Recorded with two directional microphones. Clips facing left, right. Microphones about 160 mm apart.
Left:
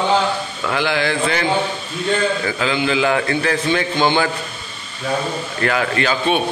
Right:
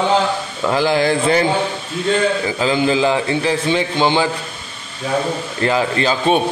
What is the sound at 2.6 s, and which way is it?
Speech, 40° right (ahead or behind).